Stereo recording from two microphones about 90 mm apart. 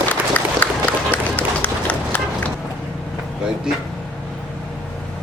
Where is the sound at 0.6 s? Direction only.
15° left (ahead or behind).